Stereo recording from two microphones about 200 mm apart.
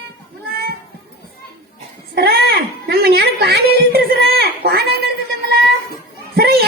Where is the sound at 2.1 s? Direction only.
55° right (ahead or behind).